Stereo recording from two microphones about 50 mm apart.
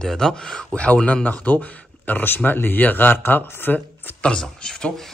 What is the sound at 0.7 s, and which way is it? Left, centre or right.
Speech, left.